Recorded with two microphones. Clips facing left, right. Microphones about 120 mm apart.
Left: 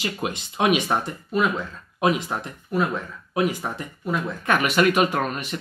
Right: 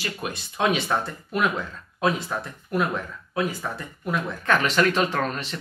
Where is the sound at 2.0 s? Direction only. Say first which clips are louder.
Left 2 dB; 15° left (ahead or behind).